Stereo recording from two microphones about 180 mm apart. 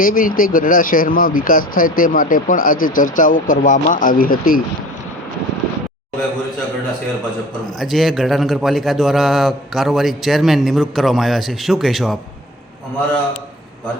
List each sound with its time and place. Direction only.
0.0 s speech: 50° left (ahead or behind)
7.8 s a man's voice: centre (ahead or behind)